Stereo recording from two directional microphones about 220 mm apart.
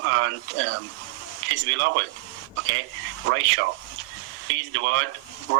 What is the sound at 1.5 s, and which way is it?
Speech, 60° right (ahead or behind).